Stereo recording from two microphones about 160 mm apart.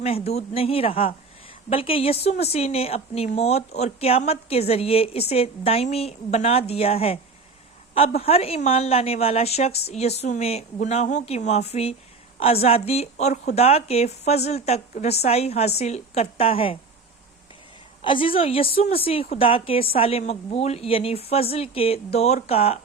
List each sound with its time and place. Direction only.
0.0 s a woman's voice: 40° left (ahead or behind)
18.0 s a woman's voice: 30° left (ahead or behind)